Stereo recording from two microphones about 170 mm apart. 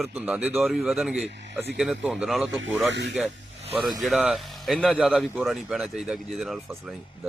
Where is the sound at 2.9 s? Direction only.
90° right.